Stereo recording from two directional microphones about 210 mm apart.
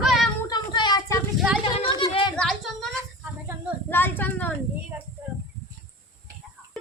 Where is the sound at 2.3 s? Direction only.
5° left (ahead or behind).